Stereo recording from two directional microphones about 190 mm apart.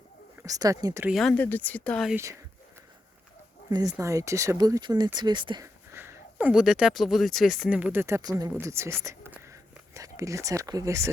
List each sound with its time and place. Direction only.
0.3 s speech: 20° right (ahead or behind)
1.0 s speech: centre (ahead or behind)
3.7 s speech: 20° right (ahead or behind)
5.9 s speech: 10° right (ahead or behind)